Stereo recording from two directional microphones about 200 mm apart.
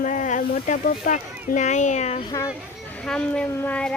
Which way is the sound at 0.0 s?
40° left (ahead or behind).